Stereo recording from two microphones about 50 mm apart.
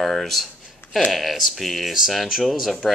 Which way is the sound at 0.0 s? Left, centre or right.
Centre.